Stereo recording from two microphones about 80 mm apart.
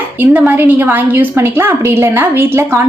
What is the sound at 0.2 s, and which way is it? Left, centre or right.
A woman's voice, right.